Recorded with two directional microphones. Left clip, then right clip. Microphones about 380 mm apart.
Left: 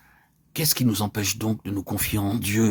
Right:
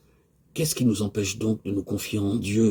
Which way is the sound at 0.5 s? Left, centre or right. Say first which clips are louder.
Left 1 dB; left.